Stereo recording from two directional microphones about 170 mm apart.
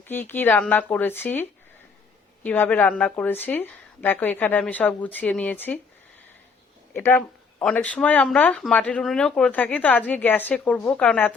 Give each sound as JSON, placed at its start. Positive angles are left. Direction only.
{"t": 0.1, "sound": "speech", "side_deg": 10}
{"t": 6.9, "sound": "speech", "side_deg": 10}